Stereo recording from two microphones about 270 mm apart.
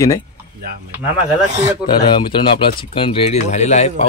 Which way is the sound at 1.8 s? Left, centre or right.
Centre.